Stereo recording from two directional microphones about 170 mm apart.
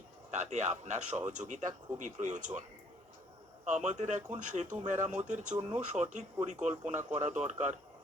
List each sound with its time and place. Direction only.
0.3 s speech: 45° right (ahead or behind)
3.7 s speech: 45° right (ahead or behind)